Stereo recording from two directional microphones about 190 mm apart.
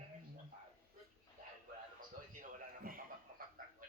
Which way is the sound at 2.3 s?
45° right (ahead or behind).